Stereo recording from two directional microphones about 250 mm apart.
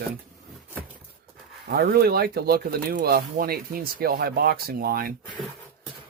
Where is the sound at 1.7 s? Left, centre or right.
Right.